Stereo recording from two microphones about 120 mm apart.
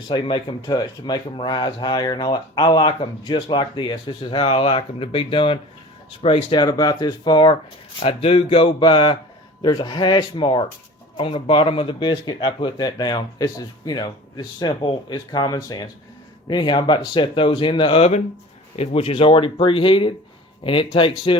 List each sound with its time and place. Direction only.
0.1 s speech: 40° left (ahead or behind)
7.9 s speech: 55° left (ahead or behind)
11.2 s speech: 50° left (ahead or behind)